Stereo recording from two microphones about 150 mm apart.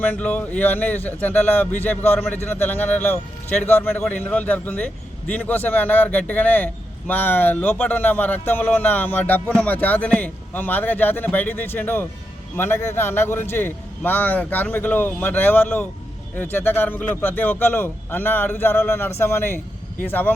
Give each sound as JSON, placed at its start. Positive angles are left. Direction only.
{"t": 0.0, "sound": "speech", "side_deg": 10}